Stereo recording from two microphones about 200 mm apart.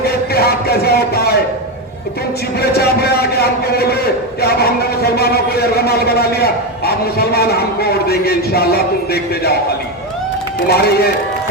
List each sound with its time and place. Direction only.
0.0 s a sound: 50° left (ahead or behind)
2.6 s a man's voice: 50° left (ahead or behind)
10.7 s a man's voice: 50° left (ahead or behind)